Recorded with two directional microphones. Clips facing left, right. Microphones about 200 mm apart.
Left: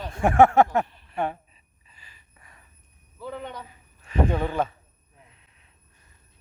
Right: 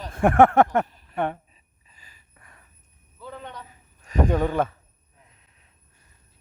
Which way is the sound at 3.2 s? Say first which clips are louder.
Left 4 dB; 10° left (ahead or behind).